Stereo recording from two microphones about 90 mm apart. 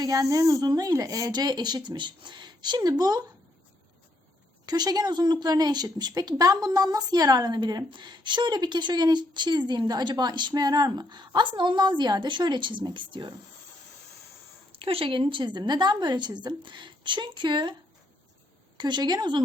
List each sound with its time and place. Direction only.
0.0 s a woman's voice: 40° right (ahead or behind)
4.6 s a woman's voice: 50° right (ahead or behind); by 13.3 s 65° right (ahead or behind)
14.8 s speech: 90° right; by 17.7 s 60° right (ahead or behind)
18.8 s speech: 55° right (ahead or behind)